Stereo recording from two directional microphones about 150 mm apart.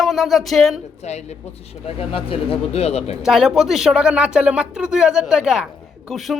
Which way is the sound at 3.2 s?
Centre (ahead or behind).